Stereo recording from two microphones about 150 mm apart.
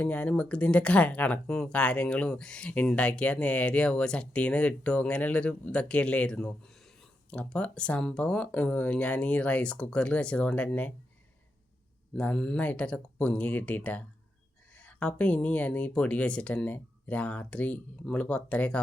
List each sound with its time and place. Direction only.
0.0 s speech: 10° left (ahead or behind)
12.1 s speech: 5° left (ahead or behind)